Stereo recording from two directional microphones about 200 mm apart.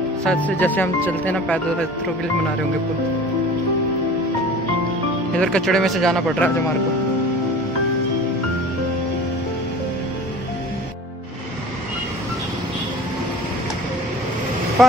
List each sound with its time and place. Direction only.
0.2 s speech: 5° left (ahead or behind)
5.3 s speech: 5° left (ahead or behind)
14.8 s speech: centre (ahead or behind)